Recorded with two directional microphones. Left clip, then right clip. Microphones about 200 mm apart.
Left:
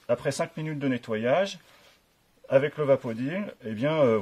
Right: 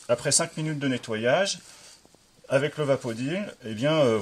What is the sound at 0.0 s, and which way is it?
Speech, 30° left (ahead or behind).